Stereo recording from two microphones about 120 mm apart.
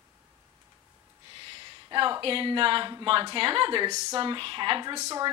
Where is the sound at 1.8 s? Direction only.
45° right (ahead or behind).